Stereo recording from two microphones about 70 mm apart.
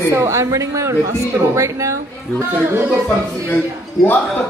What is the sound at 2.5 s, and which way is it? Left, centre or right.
Speech, right.